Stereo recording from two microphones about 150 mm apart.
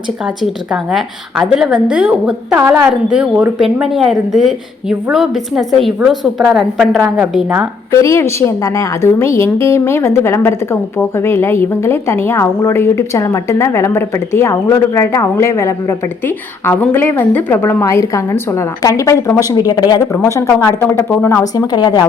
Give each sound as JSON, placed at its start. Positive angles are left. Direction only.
{"t": 0.4, "sound": "a woman's voice", "side_deg": 0}
{"t": 7.9, "sound": "a woman's voice", "side_deg": 20}